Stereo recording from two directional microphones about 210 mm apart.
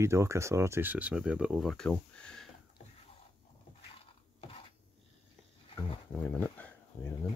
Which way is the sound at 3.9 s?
25° left (ahead or behind).